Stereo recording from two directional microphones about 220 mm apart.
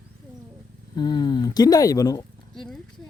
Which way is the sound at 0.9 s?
20° left (ahead or behind).